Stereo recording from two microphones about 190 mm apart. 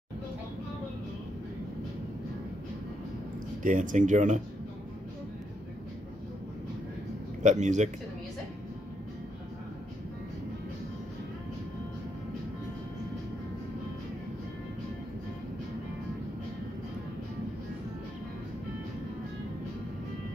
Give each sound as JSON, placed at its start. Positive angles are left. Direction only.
{"t": 3.6, "sound": "speech", "side_deg": -40}
{"t": 7.4, "sound": "speech", "side_deg": -40}